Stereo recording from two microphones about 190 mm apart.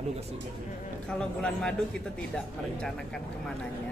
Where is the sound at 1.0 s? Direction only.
5° left (ahead or behind).